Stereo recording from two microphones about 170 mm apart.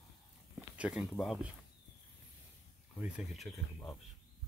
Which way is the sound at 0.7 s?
5° right (ahead or behind).